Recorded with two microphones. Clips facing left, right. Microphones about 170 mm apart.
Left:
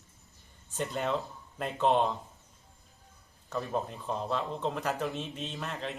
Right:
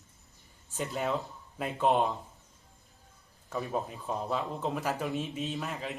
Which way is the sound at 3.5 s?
Centre (ahead or behind).